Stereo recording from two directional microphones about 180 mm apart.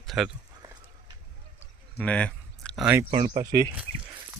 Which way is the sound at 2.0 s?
5° left (ahead or behind).